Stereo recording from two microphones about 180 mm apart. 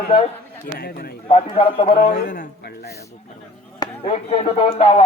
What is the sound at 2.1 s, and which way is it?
Speech, 60° left (ahead or behind).